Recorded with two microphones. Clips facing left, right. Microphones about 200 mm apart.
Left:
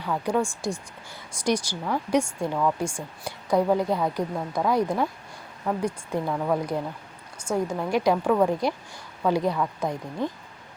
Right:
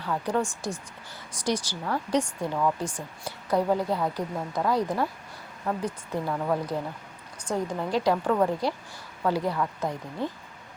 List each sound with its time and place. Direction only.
0.0 s a woman's voice: 10° left (ahead or behind)